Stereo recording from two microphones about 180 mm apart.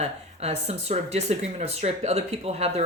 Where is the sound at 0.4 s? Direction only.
35° right (ahead or behind).